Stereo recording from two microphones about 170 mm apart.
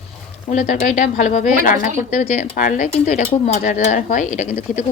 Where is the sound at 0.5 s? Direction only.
50° left (ahead or behind).